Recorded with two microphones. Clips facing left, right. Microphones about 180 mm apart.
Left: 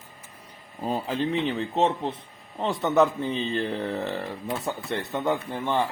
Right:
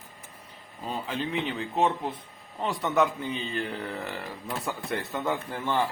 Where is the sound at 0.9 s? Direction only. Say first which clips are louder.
Left 5 dB; 35° left (ahead or behind).